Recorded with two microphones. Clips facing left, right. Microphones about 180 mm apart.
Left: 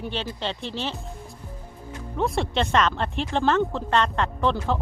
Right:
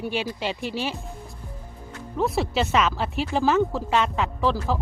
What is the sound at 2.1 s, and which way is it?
Speech, 5° right (ahead or behind).